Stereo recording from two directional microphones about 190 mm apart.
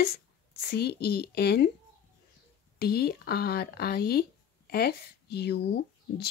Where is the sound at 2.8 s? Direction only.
55° left (ahead or behind).